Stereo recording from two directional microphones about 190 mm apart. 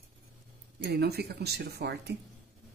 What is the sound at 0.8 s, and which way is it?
Speech, 60° right (ahead or behind).